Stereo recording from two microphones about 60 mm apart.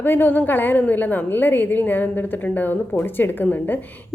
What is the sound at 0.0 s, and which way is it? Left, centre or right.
A woman's voice, left.